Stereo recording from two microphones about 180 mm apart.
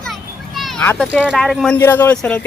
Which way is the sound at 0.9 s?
10° left (ahead or behind).